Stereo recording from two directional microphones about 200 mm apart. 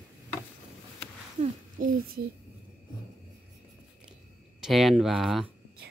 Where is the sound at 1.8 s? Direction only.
45° right (ahead or behind).